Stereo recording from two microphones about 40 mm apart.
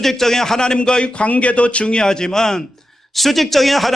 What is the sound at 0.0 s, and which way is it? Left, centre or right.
A man's voice, centre.